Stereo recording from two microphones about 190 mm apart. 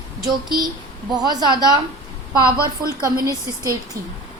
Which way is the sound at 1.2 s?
20° right (ahead or behind).